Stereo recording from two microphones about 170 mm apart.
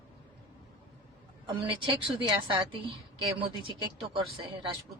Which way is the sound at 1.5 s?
30° right (ahead or behind).